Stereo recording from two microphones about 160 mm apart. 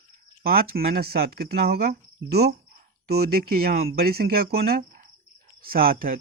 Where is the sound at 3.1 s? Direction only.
75° right (ahead or behind).